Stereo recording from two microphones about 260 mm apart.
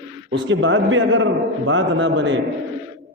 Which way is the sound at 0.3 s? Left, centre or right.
Right.